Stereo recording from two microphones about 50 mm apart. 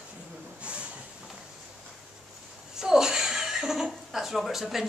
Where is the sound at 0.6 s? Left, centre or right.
Right.